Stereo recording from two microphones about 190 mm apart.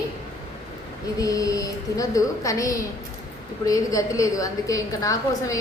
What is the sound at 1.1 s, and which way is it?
A woman's voice, 20° left (ahead or behind).